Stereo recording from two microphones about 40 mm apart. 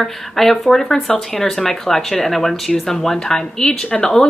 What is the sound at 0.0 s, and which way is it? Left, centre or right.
Speech, centre.